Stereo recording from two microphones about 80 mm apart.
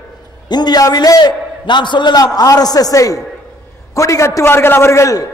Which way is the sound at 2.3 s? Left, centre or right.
Left.